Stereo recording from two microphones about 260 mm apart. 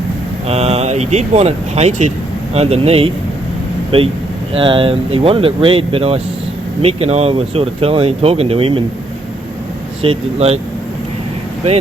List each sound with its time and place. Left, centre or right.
0.4 s speech: right
10.0 s speech: right